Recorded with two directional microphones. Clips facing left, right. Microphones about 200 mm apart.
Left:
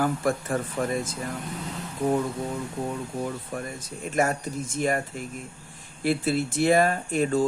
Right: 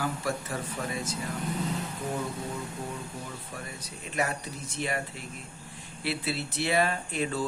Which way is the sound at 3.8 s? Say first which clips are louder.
Left 6 dB; 45° left (ahead or behind).